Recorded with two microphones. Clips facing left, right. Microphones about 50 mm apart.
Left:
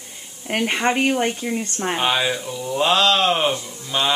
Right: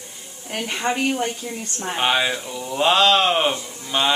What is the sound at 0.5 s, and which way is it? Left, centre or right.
A woman's voice, left.